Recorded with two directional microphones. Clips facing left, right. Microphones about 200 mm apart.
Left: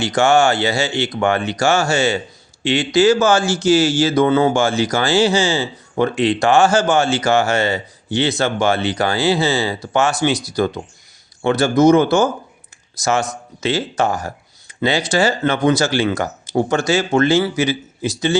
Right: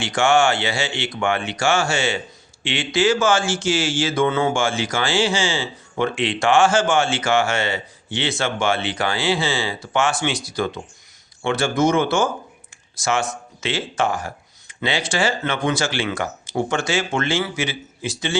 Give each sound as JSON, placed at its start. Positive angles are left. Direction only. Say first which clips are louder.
{"t": 0.0, "sound": "speech", "louder": "left 3 dB", "side_deg": 40}